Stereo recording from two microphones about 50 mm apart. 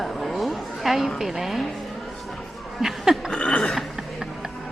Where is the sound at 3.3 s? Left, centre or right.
Left.